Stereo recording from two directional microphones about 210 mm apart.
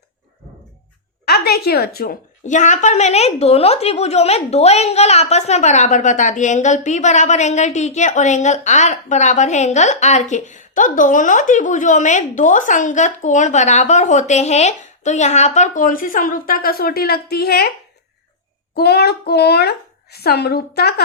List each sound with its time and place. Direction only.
1.2 s a woman's voice: 50° left (ahead or behind)
18.7 s a child's voice: 50° left (ahead or behind)